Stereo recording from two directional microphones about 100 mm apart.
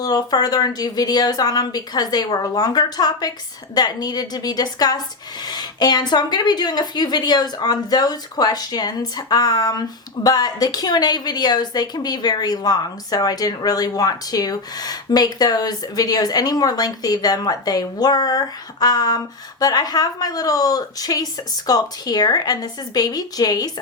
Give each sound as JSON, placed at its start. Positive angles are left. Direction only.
{"t": 0.0, "sound": "a woman's voice", "side_deg": 40}